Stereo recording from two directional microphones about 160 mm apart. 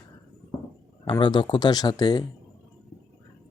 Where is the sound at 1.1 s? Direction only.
30° left (ahead or behind).